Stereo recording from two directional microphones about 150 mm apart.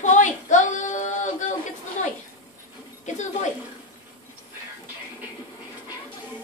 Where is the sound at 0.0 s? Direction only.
55° left (ahead or behind).